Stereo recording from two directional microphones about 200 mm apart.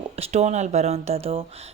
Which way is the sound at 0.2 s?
35° right (ahead or behind).